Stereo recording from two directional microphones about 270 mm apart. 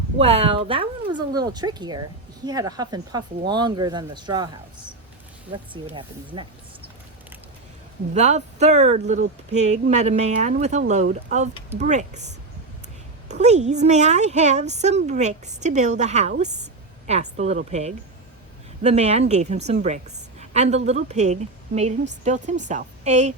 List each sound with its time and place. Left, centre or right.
0.2 s speech: right
5.7 s speech: centre
8.1 s a woman's voice: right